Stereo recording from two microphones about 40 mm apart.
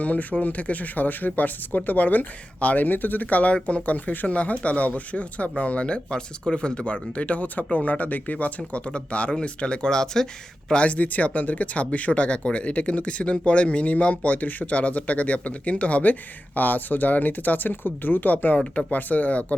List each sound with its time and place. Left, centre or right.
0.0 s speech: left; by 10.2 s centre
10.7 s speech: left
16.6 s speech: left
18.5 s speech: left
18.9 s speech: left